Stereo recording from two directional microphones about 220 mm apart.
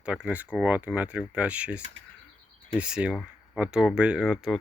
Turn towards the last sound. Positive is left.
turn(degrees=0)  # may be behind; listen again after turning